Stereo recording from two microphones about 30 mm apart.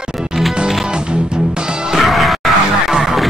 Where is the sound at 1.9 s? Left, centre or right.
Centre.